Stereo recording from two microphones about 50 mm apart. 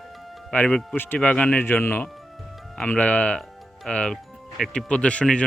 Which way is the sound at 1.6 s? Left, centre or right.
Left.